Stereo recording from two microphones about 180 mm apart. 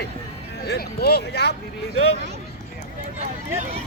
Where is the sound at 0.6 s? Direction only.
60° left (ahead or behind).